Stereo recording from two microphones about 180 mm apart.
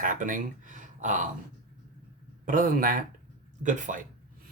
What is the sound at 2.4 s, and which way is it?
Speech, 50° right (ahead or behind).